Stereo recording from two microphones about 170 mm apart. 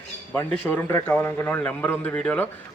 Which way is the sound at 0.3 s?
10° left (ahead or behind).